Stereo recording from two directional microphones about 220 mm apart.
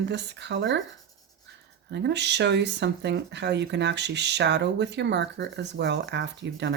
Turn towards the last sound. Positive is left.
turn(degrees=-50)  # may be behind; listen again after turning